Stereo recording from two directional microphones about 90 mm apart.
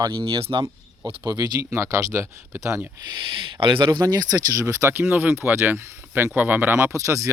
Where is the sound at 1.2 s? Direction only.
45° right (ahead or behind).